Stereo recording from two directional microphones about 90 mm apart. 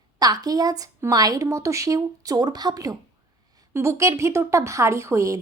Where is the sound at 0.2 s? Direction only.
45° right (ahead or behind).